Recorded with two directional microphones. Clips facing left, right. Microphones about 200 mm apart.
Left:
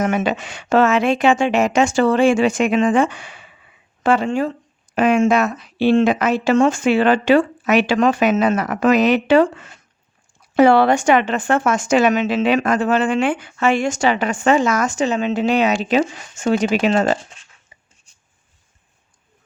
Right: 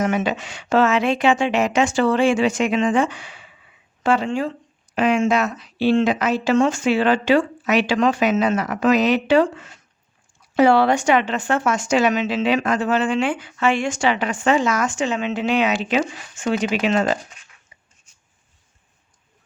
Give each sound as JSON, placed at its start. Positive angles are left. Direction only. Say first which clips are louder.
{"t": 0.0, "sound": "speech", "louder": "left 2 dB", "side_deg": 55}
{"t": 17.2, "sound": "speech", "louder": "even", "side_deg": 30}